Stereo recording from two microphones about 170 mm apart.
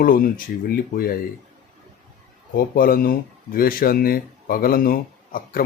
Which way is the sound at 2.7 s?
60° left (ahead or behind).